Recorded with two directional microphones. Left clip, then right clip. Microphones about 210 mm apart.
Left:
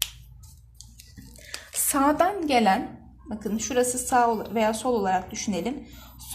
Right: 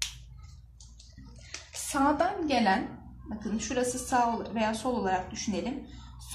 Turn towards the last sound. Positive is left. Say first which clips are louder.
# left 4 dB
turn(degrees=40)  # may be behind; listen again after turning